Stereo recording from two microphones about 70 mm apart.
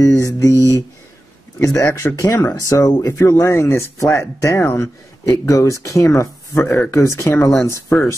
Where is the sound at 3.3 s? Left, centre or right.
Left.